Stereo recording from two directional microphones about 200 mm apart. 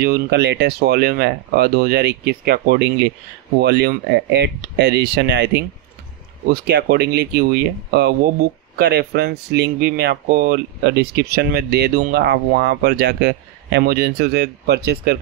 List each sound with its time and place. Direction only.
0.0 s speech: 55° right (ahead or behind)